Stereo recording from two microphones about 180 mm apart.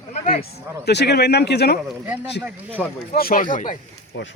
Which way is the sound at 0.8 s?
65° left (ahead or behind).